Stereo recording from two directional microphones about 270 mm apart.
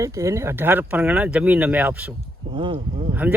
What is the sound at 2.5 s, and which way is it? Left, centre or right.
Speech, centre.